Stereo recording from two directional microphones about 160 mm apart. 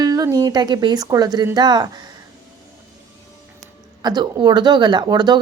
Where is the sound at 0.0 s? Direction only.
25° right (ahead or behind).